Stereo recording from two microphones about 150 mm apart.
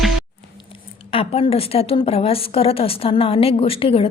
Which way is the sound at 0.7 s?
40° left (ahead or behind).